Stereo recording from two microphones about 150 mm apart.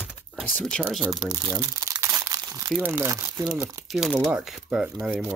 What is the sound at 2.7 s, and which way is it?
Speech, 15° right (ahead or behind).